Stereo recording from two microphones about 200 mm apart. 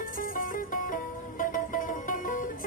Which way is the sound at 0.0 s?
45° left (ahead or behind).